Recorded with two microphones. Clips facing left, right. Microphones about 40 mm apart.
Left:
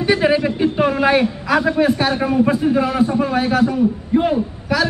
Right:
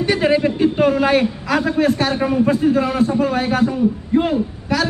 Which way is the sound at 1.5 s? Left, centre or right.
Centre.